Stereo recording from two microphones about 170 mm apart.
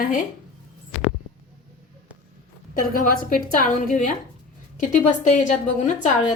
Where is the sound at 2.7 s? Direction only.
50° left (ahead or behind).